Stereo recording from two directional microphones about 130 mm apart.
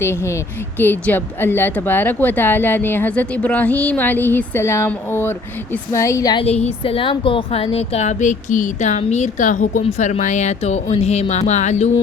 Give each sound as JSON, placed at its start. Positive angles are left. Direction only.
{"t": 0.0, "sound": "speech", "side_deg": 20}
{"t": 6.4, "sound": "speech", "side_deg": 55}
{"t": 6.8, "sound": "speech", "side_deg": 45}